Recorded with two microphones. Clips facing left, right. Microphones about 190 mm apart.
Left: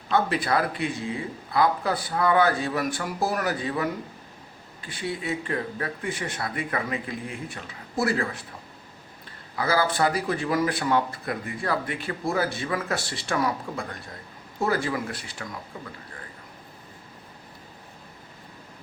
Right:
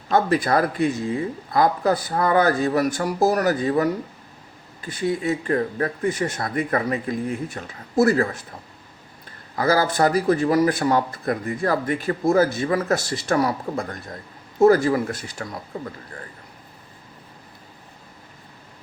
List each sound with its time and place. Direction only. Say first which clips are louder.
0.1 s a man's voice: right 4 dB; 45° right (ahead or behind)
4.9 s a man's voice: right 7 dB; 45° right (ahead or behind)
9.6 s a man's voice: right 4 dB; 45° right (ahead or behind)